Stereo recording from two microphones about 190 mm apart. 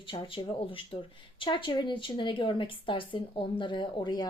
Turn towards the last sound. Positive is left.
turn(degrees=20)  # may be behind; listen again after turning